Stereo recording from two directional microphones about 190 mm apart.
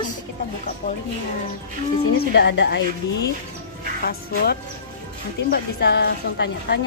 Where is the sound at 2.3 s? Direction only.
65° left (ahead or behind).